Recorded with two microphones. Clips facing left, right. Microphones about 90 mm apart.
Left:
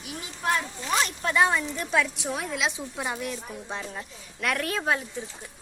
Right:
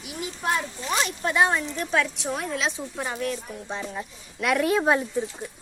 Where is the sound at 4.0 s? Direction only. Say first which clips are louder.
Right 3 dB; 10° right (ahead or behind).